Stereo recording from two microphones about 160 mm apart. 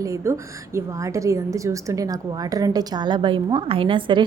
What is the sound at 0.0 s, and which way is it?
A woman's voice, 20° right (ahead or behind).